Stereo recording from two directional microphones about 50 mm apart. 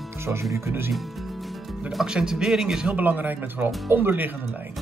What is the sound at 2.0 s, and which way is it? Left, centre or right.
Speech, centre.